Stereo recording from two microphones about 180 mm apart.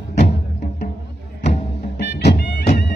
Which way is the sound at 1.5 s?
70° left (ahead or behind).